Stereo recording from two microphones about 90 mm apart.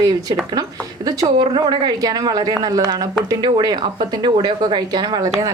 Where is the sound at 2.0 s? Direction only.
45° right (ahead or behind).